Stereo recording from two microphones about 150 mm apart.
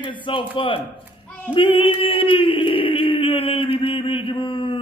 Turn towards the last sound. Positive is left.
turn(degrees=35)  # may be behind; listen again after turning